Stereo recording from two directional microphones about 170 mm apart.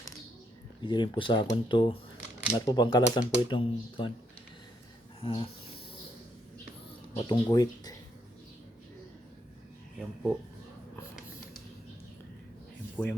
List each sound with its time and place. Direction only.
0.8 s speech: 25° left (ahead or behind)
5.2 s speech: 30° left (ahead or behind)
7.2 s speech: 25° left (ahead or behind)
13.0 s speech: 10° left (ahead or behind)